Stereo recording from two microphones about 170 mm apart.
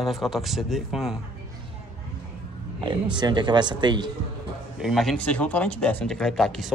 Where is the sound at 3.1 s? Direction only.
25° right (ahead or behind).